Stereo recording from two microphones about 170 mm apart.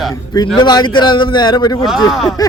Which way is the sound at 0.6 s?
25° left (ahead or behind).